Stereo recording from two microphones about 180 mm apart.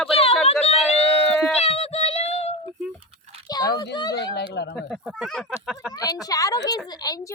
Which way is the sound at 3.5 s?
20° left (ahead or behind).